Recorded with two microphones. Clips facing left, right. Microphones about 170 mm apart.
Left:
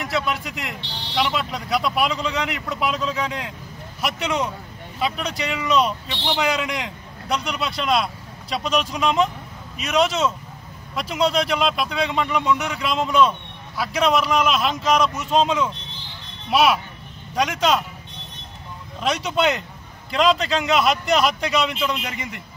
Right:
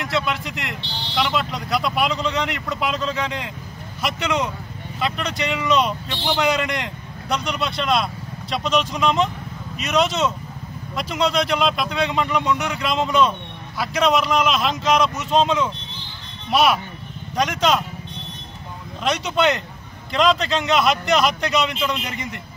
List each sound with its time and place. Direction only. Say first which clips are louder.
0.0 s a man's voice: right 1 dB; 5° left (ahead or behind)
19.0 s a man's voice: right 1 dB; 5° left (ahead or behind)